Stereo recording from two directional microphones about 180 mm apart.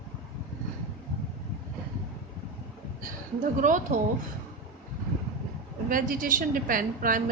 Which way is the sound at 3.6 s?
45° right (ahead or behind).